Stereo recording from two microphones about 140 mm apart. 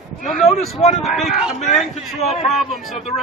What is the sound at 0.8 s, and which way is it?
Speech, 50° left (ahead or behind).